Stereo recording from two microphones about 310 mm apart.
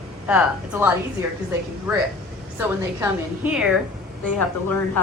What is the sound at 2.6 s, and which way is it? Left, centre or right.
Speech, centre.